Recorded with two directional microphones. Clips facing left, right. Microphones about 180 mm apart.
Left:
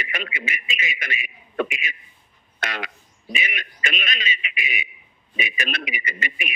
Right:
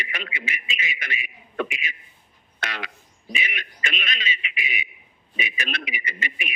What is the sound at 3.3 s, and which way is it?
A man's voice, 50° left (ahead or behind).